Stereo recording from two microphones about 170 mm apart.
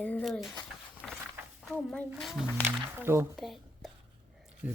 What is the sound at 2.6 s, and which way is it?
Speech, 15° right (ahead or behind).